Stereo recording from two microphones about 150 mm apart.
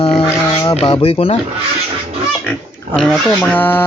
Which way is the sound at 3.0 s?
Centre (ahead or behind).